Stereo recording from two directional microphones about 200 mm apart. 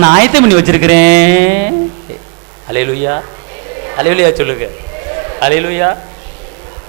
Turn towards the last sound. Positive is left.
turn(degrees=-15)  # may be behind; listen again after turning